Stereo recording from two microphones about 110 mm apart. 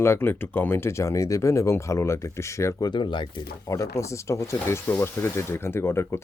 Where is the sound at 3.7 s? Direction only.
30° left (ahead or behind).